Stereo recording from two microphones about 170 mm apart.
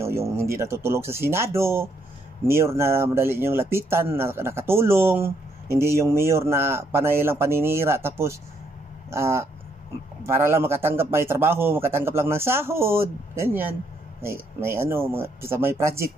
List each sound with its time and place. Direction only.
0.0 s speech: 15° right (ahead or behind)